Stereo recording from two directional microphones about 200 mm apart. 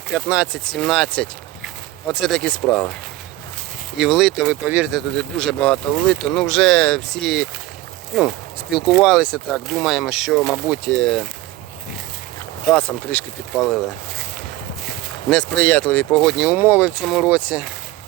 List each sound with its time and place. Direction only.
0.3 s speech: 5° right (ahead or behind)
3.9 s speech: centre (ahead or behind)
8.9 s speech: centre (ahead or behind)
12.7 s speech: 5° left (ahead or behind)
15.3 s speech: 5° left (ahead or behind)